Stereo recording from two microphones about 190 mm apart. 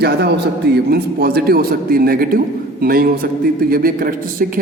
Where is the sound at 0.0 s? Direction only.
60° right (ahead or behind).